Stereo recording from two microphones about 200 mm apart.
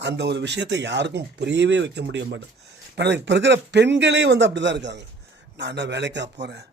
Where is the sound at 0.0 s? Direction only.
60° right (ahead or behind).